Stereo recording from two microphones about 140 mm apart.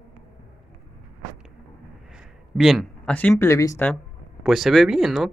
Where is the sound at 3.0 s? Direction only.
10° left (ahead or behind).